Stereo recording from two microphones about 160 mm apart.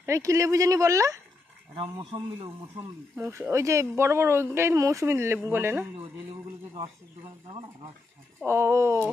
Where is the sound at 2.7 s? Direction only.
15° right (ahead or behind).